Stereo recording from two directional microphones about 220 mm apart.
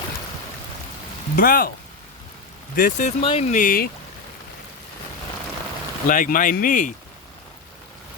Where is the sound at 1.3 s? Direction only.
40° left (ahead or behind).